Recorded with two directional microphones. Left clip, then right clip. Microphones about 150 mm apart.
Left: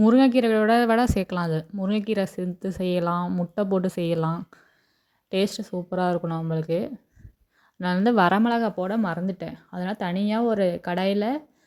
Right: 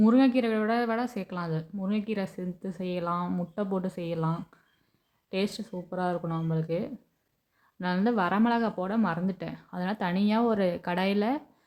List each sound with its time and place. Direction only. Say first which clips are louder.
0.0 s a woman's voice: left 5 dB; 40° left (ahead or behind)
8.4 s speech: left 4 dB; 30° left (ahead or behind)